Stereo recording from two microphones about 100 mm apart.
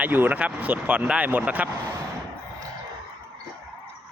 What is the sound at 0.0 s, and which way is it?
Speech, 15° right (ahead or behind).